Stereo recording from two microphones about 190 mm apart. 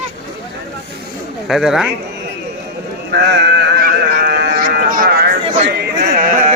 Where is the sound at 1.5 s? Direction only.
Centre (ahead or behind).